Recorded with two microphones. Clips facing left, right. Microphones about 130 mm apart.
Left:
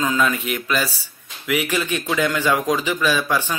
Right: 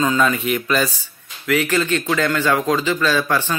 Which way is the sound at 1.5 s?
15° left (ahead or behind).